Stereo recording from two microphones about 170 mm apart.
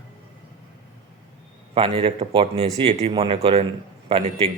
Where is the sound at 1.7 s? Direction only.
30° right (ahead or behind).